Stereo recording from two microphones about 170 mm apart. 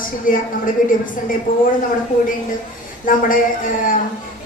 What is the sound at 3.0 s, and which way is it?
Speech, 55° left (ahead or behind).